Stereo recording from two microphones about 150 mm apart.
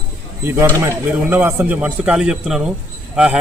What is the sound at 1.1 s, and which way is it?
A man's voice, 10° right (ahead or behind).